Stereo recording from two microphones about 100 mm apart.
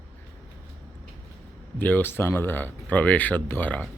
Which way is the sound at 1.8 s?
20° left (ahead or behind).